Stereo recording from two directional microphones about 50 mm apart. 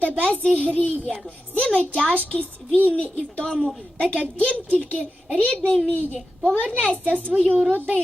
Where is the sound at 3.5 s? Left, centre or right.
Centre.